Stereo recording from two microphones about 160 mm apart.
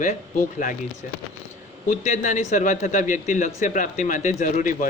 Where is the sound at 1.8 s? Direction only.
50° left (ahead or behind).